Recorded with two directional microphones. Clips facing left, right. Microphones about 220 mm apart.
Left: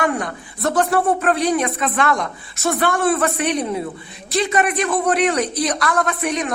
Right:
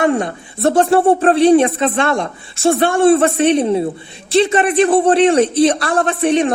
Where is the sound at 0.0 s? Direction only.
25° right (ahead or behind).